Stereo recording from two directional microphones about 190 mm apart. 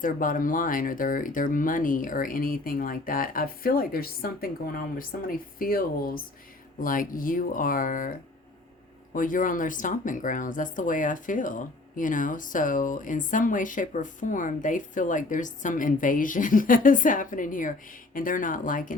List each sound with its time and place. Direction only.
0.0 s speech: 45° left (ahead or behind)
9.1 s speech: 45° left (ahead or behind)